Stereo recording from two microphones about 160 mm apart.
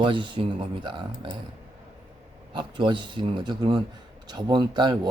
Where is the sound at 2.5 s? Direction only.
30° right (ahead or behind).